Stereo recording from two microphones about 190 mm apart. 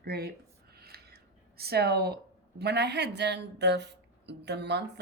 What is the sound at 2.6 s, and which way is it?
Speech, 60° right (ahead or behind).